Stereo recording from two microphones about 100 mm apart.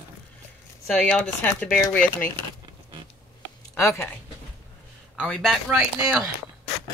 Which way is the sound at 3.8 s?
30° left (ahead or behind).